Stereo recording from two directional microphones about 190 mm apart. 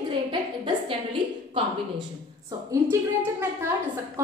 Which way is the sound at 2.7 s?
10° right (ahead or behind).